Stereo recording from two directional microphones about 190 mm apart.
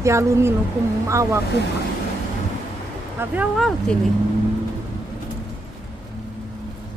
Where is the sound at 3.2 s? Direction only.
5° right (ahead or behind).